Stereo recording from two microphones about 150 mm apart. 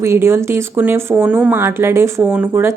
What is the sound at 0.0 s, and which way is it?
A woman's voice, 15° right (ahead or behind).